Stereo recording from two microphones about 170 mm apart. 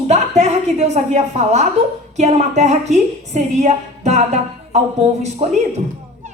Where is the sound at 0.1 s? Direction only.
40° right (ahead or behind).